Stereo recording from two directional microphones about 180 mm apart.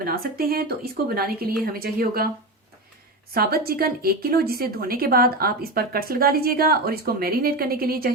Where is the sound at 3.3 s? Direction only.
55° right (ahead or behind).